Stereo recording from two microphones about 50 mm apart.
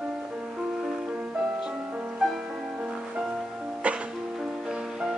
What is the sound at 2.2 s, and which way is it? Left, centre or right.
Music, centre.